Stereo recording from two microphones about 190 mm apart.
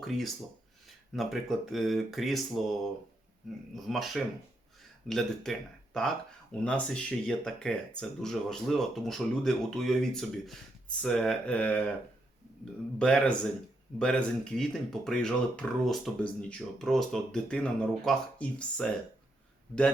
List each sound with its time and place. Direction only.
0.0 s speech: centre (ahead or behind)
3.8 s speech: centre (ahead or behind)
13.0 s speech: 5° left (ahead or behind)